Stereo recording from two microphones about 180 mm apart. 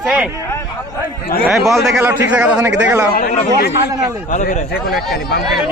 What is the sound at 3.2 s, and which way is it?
Speech, 50° left (ahead or behind).